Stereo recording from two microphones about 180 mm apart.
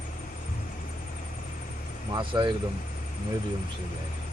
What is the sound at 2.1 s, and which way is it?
Speech, 25° right (ahead or behind).